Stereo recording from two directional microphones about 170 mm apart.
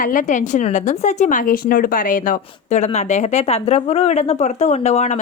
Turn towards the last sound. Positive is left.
turn(degrees=40)  # may be behind; listen again after turning